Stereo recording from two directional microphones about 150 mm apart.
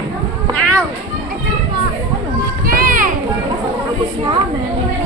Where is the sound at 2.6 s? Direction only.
70° right (ahead or behind).